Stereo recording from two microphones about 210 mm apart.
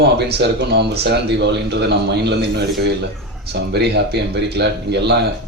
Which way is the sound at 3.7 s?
50° right (ahead or behind).